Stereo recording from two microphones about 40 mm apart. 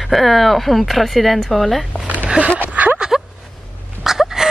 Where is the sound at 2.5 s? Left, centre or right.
Right.